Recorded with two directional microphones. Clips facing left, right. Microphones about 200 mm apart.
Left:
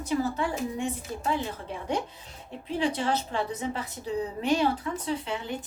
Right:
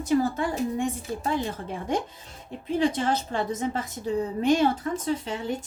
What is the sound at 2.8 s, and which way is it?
A woman's voice, 45° right (ahead or behind).